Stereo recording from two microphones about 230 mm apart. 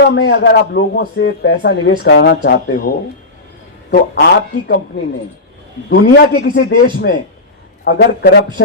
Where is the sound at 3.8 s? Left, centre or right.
Left.